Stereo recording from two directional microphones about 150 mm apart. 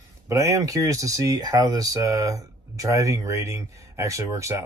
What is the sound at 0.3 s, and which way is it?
Speech, 20° right (ahead or behind).